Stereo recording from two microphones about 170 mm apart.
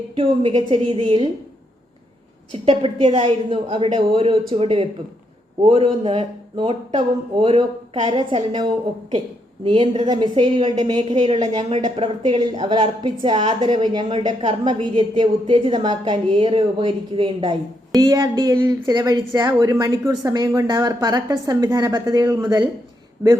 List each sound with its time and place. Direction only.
0.2 s a woman's voice: 30° right (ahead or behind)
2.5 s a woman's voice: 35° right (ahead or behind)
9.7 s a woman's voice: 30° right (ahead or behind); by 22.6 s 15° right (ahead or behind)